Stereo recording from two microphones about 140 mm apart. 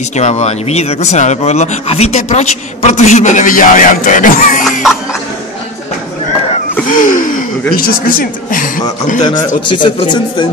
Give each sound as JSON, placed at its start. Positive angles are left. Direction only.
{"t": 0.1, "sound": "speech", "side_deg": 55}
{"t": 6.9, "sound": "gasp", "side_deg": 70}
{"t": 7.7, "sound": "speech", "side_deg": 90}
{"t": 9.7, "sound": "speech", "side_deg": 35}